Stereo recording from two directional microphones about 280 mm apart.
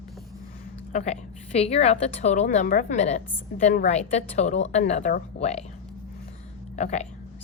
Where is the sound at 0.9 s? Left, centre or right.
Left.